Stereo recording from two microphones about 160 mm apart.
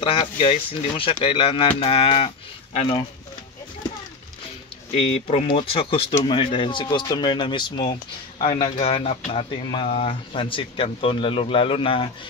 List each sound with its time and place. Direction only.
0.0 s speech: 35° left (ahead or behind)
4.9 s speech: 40° left (ahead or behind)